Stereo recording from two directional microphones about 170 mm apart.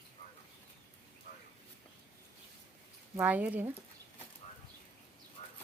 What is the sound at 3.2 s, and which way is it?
Speech, 10° right (ahead or behind).